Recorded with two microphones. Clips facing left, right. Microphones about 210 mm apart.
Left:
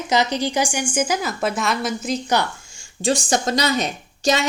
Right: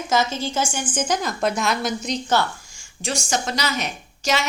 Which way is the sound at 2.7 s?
35° left (ahead or behind).